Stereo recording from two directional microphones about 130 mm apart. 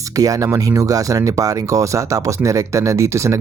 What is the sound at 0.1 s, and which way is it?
Speech, 25° right (ahead or behind).